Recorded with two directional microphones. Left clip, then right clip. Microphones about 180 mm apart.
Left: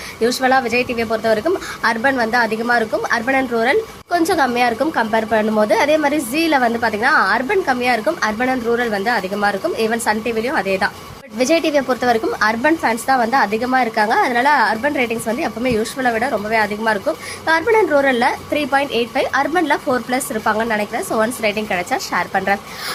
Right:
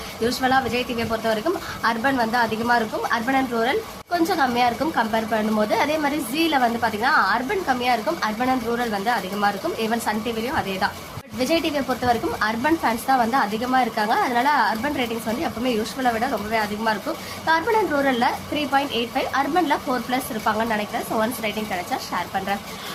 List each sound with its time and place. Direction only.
0.2 s a woman's voice: 25° left (ahead or behind)